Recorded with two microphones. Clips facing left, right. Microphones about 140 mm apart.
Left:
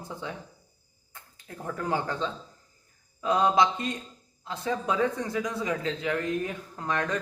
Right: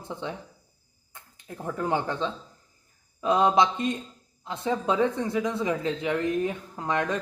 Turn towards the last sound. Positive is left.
turn(degrees=-20)  # may be behind; listen again after turning